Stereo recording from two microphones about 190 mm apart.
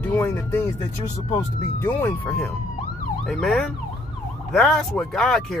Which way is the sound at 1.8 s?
10° left (ahead or behind).